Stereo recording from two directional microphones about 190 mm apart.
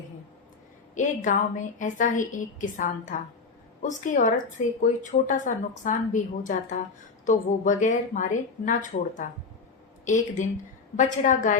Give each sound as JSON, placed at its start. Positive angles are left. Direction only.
{"t": 0.9, "sound": "a woman's voice", "side_deg": 40}
{"t": 10.9, "sound": "a woman's voice", "side_deg": 40}